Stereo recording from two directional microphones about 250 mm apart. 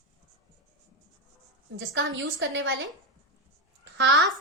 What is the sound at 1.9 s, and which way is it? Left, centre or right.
Speech, right.